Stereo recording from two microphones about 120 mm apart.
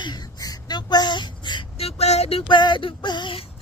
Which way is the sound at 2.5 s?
40° left (ahead or behind).